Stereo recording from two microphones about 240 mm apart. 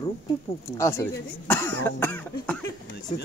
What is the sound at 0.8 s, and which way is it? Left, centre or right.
Cough, centre.